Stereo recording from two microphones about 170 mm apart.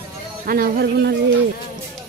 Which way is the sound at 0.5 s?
60° right (ahead or behind).